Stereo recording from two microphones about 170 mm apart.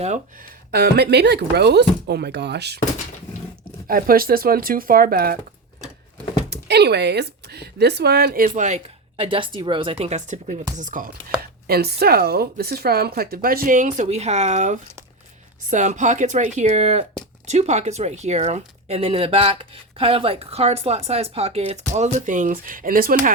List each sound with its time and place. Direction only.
0.7 s speech: 70° right (ahead or behind)
3.8 s speech: 60° right (ahead or behind)
6.5 s speech: 75° right (ahead or behind); by 11.1 s 50° right (ahead or behind)
11.7 s speech: 70° right (ahead or behind)